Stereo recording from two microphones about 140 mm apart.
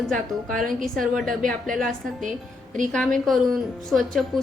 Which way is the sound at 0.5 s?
75° right (ahead or behind).